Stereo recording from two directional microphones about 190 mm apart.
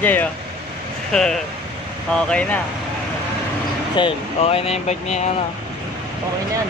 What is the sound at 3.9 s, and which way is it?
Speech, 30° left (ahead or behind).